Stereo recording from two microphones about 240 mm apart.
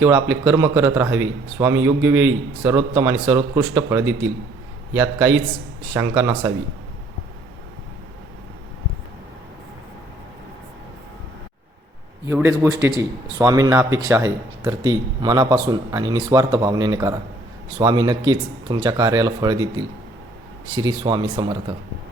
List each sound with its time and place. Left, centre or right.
0.0 s speech: centre
12.2 s speech: centre